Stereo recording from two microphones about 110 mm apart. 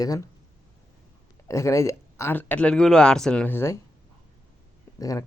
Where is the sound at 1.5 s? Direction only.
25° left (ahead or behind).